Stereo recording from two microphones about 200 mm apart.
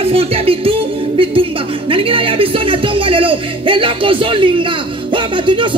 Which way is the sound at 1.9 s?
25° right (ahead or behind).